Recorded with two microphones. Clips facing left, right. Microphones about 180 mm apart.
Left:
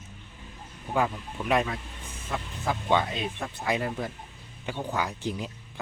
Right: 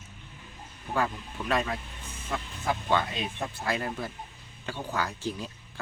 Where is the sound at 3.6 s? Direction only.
15° left (ahead or behind).